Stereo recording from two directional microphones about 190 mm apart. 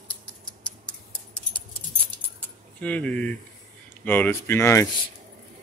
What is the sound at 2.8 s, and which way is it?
Speech, 5° left (ahead or behind).